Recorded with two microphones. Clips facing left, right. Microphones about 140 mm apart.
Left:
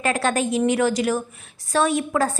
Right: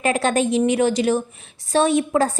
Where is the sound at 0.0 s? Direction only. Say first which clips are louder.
Right 3 dB; 20° right (ahead or behind).